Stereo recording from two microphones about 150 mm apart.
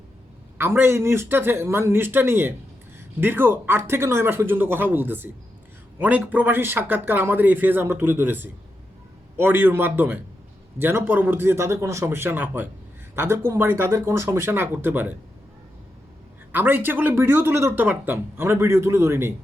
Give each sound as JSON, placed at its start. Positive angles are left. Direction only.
{"t": 0.6, "sound": "speech", "side_deg": -15}
{"t": 16.5, "sound": "speech", "side_deg": -10}